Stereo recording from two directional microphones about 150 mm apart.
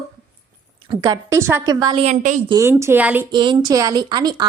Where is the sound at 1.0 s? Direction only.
25° right (ahead or behind).